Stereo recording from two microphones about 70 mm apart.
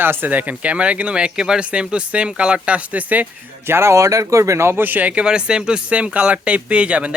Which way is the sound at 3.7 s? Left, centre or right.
Right.